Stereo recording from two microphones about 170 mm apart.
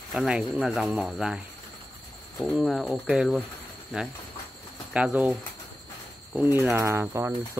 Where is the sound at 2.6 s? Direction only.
Centre (ahead or behind).